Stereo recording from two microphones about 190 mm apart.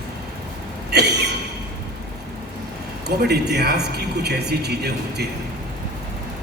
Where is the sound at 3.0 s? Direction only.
60° right (ahead or behind).